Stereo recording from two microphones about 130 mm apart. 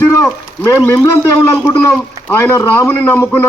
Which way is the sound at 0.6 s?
20° left (ahead or behind).